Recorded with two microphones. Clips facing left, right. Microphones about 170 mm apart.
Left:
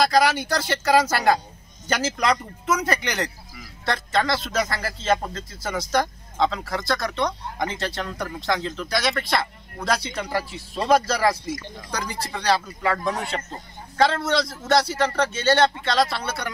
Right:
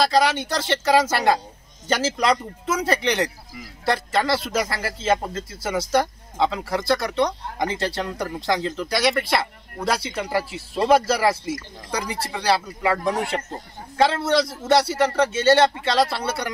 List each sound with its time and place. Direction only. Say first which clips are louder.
0.0 s speech: even; 25° right (ahead or behind)
0.8 s a man's voice: even; centre (ahead or behind)
1.9 s speech: right 2 dB; 30° right (ahead or behind)
3.8 s a man's voice: right 2 dB; 5° right (ahead or behind)